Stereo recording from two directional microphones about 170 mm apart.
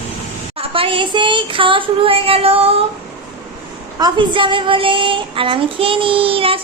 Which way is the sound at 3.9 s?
25° right (ahead or behind).